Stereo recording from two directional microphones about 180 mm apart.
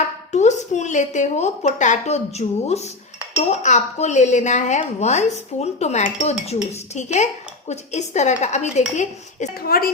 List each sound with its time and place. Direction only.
0.3 s speech: 40° left (ahead or behind)
9.6 s a woman's voice: 55° left (ahead or behind)